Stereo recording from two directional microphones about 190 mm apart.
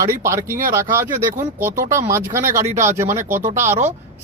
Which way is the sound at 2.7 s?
40° right (ahead or behind).